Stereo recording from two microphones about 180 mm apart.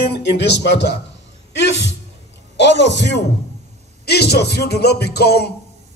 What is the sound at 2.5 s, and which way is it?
A man's voice, 75° left (ahead or behind).